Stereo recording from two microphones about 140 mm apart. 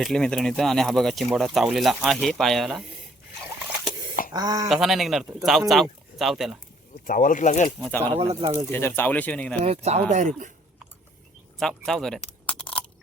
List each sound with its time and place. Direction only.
0.0 s speech: 5° left (ahead or behind)
4.3 s speech: 30° right (ahead or behind)
4.7 s speech: centre (ahead or behind)
7.0 s speech: 70° left (ahead or behind)
7.8 s speech: 10° left (ahead or behind)
8.2 s speech: 45° right (ahead or behind)
8.7 s speech: 15° left (ahead or behind)
9.6 s speech: 50° right (ahead or behind)
10.1 s speech: 65° right (ahead or behind)
11.6 s speech: 5° left (ahead or behind)